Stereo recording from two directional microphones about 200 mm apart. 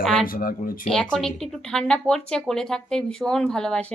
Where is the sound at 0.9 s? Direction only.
5° left (ahead or behind).